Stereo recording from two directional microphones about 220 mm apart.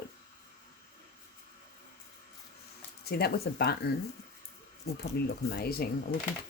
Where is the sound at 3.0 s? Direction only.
45° left (ahead or behind).